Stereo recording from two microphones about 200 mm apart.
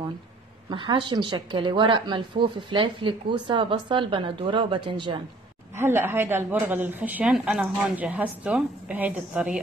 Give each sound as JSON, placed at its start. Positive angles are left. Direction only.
{"t": 0.7, "sound": "speech", "side_deg": -25}
{"t": 5.8, "sound": "a woman's voice", "side_deg": -10}